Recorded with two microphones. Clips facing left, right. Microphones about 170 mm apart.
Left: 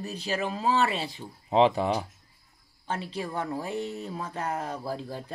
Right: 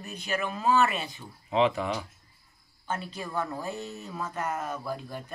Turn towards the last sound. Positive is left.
turn(degrees=30)  # may be behind; listen again after turning